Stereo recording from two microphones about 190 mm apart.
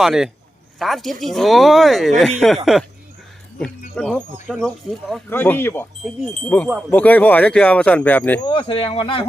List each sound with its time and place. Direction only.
0.0 s speech: centre (ahead or behind)
3.6 s speech: 5° left (ahead or behind)
5.3 s speech: 10° left (ahead or behind)
8.4 s speech: 25° left (ahead or behind)